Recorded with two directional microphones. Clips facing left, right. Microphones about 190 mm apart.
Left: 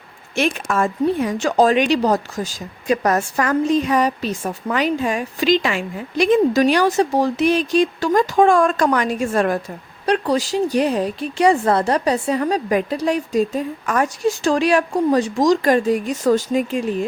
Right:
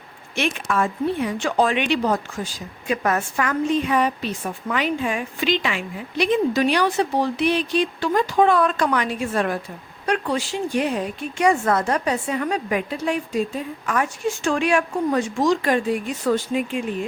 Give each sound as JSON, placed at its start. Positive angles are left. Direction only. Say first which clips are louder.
{"t": 0.3, "sound": "speech", "louder": "left 3 dB", "side_deg": 40}